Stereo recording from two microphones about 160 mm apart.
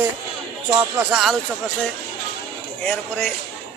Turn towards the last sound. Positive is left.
turn(degrees=10)  # may be behind; listen again after turning